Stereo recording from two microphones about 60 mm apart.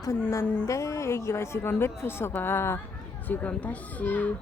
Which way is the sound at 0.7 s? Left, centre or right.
Left.